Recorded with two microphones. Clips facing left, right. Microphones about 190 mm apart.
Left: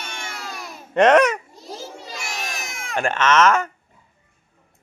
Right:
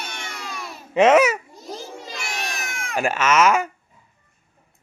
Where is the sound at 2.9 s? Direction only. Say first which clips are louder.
Left 1 dB; 5° right (ahead or behind).